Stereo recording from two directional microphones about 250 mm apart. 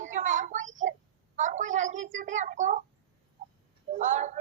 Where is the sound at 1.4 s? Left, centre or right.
Right.